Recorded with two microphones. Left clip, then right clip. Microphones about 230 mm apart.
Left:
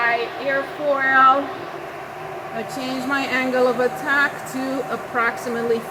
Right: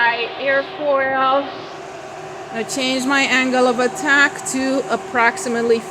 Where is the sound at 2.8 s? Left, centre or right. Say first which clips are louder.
Right 7 dB; right.